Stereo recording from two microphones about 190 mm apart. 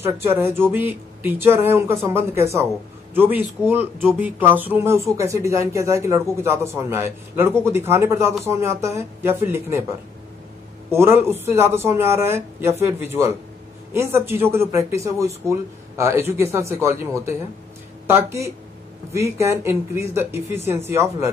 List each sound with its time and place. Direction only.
0.0 s speech: 10° right (ahead or behind)
10.9 s speech: 15° right (ahead or behind)